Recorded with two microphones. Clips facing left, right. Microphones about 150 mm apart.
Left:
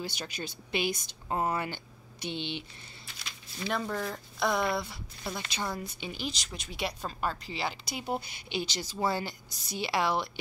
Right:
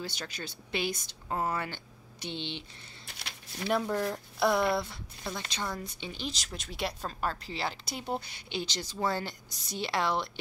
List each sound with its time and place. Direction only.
0.0 s speech: 15° left (ahead or behind)
3.1 s a sound: 65° right (ahead or behind)
3.6 s speech: 5° right (ahead or behind)